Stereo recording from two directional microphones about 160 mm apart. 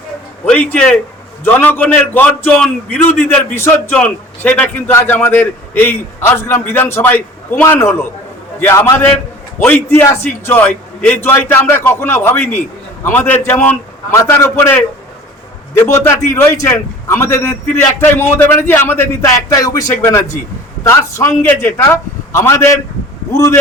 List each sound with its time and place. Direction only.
0.4 s a man's voice: 5° left (ahead or behind)
15.8 s a man's voice: 15° left (ahead or behind)